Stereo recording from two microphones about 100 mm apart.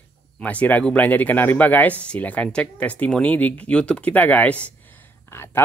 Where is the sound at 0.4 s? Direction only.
15° left (ahead or behind).